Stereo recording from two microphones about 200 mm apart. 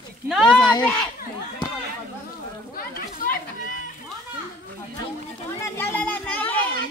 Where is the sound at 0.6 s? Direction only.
20° left (ahead or behind).